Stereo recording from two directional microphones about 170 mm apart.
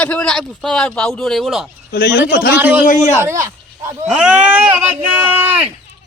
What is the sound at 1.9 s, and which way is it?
Speech, 85° left.